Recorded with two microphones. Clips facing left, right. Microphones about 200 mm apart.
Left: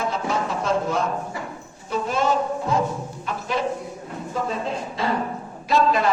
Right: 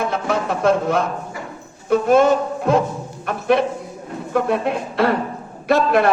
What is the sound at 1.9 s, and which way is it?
Music, 55° right (ahead or behind).